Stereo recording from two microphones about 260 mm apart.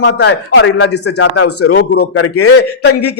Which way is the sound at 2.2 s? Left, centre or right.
Left.